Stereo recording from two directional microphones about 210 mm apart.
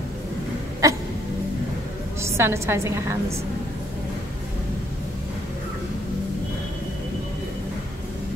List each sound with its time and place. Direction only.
0.8 s a woman's voice: 15° right (ahead or behind)
2.2 s a woman's voice: 10° right (ahead or behind)